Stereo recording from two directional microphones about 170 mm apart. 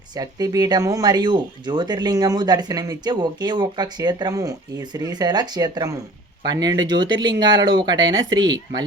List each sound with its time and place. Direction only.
0.2 s speech: 20° right (ahead or behind)